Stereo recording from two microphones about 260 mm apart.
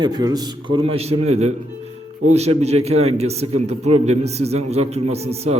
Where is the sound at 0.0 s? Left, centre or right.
Centre.